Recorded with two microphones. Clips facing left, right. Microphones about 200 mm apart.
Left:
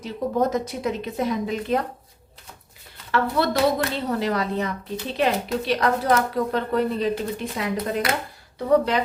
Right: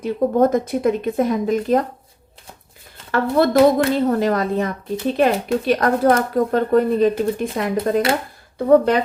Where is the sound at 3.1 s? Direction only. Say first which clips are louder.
Right 6 dB; 50° right (ahead or behind).